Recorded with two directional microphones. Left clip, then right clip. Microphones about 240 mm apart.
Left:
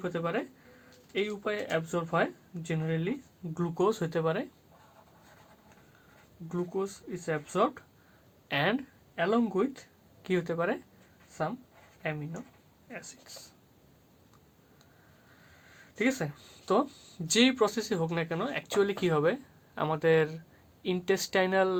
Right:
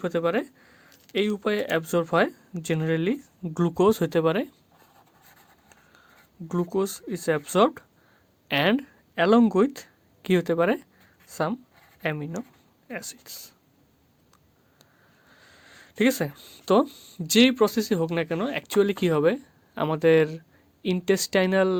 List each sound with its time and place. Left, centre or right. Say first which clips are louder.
0.0 s speech: right 7 dB; right
6.5 s speech: right 7 dB; right
15.4 s speech: right 6 dB; right